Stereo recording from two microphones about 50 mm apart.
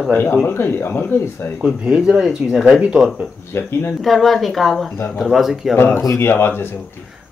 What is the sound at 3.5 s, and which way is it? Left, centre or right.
Speech, left.